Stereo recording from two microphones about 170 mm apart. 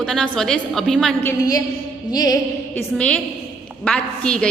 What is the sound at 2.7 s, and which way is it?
A woman's voice, 5° left (ahead or behind).